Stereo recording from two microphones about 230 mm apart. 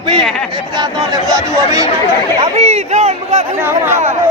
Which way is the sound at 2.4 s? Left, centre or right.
Right.